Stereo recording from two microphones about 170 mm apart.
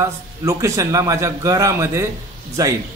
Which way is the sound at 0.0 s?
20° right (ahead or behind).